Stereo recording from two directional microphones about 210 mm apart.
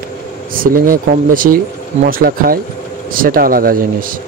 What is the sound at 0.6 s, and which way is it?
Speech, 40° right (ahead or behind).